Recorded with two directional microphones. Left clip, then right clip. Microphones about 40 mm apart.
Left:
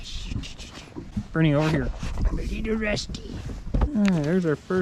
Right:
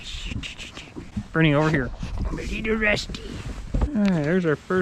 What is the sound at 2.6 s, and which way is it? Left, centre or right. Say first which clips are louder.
Speech: right 5 dB; centre.